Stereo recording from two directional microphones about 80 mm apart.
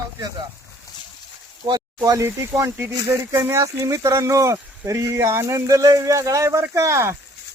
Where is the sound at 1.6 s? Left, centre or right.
Right.